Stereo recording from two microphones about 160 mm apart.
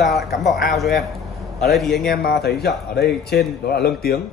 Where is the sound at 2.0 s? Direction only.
75° left (ahead or behind).